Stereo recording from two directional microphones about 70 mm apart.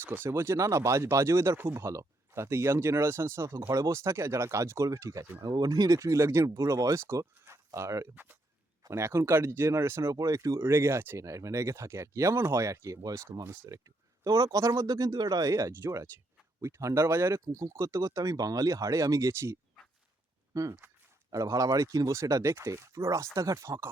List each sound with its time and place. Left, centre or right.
0.0 s speech: right
1.5 s speech: right
1.9 s speech: right
5.4 s speech: right
8.1 s speech: right
8.9 s speech: right
10.2 s speech: right
10.6 s speech: right
11.2 s speech: right
13.0 s speech: right
20.5 s speech: right